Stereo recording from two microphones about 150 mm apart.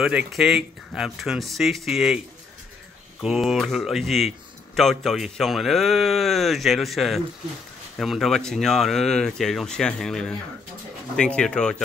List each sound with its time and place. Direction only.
0.0 s a man's voice: 5° right (ahead or behind)
3.2 s a man's voice: centre (ahead or behind)